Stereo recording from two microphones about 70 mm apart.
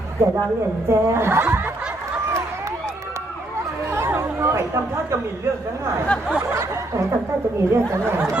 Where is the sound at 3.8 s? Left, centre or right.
Right.